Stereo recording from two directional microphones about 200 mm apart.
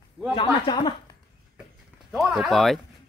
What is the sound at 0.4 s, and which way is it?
Speech, 25° left (ahead or behind).